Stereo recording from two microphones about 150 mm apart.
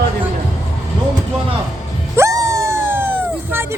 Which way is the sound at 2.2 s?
20° right (ahead or behind).